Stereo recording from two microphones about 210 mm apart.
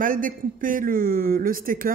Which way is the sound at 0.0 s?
40° right (ahead or behind).